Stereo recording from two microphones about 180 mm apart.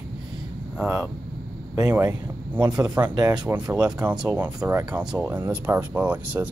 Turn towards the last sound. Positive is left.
turn(degrees=-10)  # may be behind; listen again after turning